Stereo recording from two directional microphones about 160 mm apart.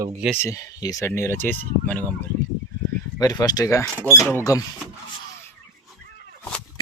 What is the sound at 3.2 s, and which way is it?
Speech, 25° left (ahead or behind).